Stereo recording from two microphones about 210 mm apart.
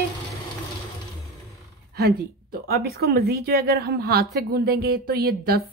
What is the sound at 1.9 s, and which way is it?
Speech, 50° right (ahead or behind).